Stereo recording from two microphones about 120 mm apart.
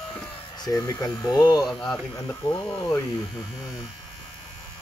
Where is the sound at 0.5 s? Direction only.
30° left (ahead or behind).